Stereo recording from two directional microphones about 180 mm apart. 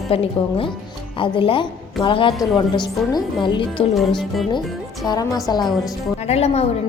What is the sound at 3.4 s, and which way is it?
Speech, 25° left (ahead or behind).